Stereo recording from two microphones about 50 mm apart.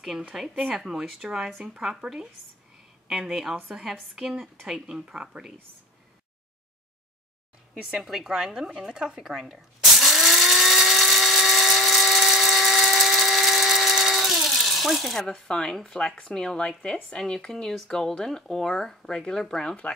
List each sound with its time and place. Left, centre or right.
0.3 s a woman's voice: centre
7.9 s a woman's voice: centre
9.2 s ratchet: centre
11.1 s dental drill: centre
16.2 s speech: centre
17.2 s speech: centre